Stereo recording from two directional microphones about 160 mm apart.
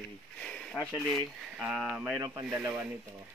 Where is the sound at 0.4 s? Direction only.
5° left (ahead or behind).